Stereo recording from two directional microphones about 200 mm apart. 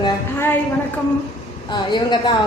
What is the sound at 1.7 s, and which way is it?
Speech, 20° left (ahead or behind).